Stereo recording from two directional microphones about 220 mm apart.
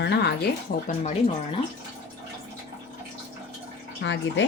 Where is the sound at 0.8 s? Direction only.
30° left (ahead or behind).